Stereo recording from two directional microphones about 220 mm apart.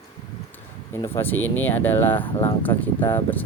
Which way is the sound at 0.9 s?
10° left (ahead or behind).